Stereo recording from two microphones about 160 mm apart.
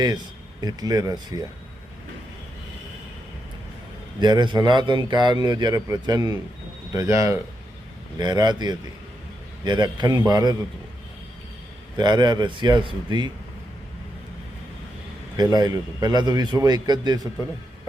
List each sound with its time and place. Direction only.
0.6 s a man's voice: 25° right (ahead or behind)
4.2 s a man's voice: 30° right (ahead or behind)
11.9 s a man's voice: 25° right (ahead or behind)
15.4 s a man's voice: 25° right (ahead or behind)